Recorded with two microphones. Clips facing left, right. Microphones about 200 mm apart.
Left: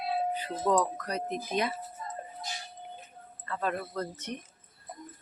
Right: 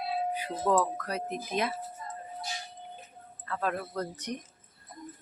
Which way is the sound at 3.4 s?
Centre (ahead or behind).